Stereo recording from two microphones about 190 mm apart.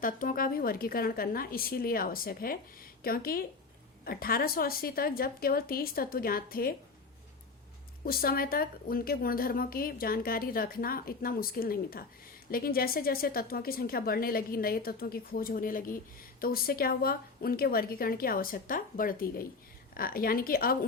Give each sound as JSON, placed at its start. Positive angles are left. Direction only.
{"t": 0.0, "sound": "a woman's voice", "side_deg": 45}
{"t": 8.0, "sound": "a woman's voice", "side_deg": 50}